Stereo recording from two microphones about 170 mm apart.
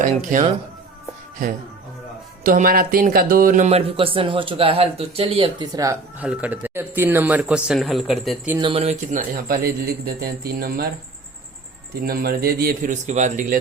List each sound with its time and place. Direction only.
0.0 s speech: 50° right (ahead or behind)
2.4 s speech: 55° right (ahead or behind); by 6.2 s 20° right (ahead or behind)
6.2 s speech: 5° right (ahead or behind)
8.6 s a man's voice: 35° right (ahead or behind); by 10.9 s 60° right (ahead or behind)
12.0 s a man's voice: 60° right (ahead or behind); by 13.6 s 45° right (ahead or behind)